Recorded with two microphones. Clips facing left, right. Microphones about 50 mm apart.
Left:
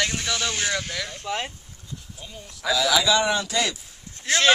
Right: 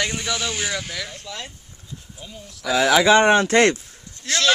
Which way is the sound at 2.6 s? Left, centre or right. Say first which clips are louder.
Right 5 dB; right.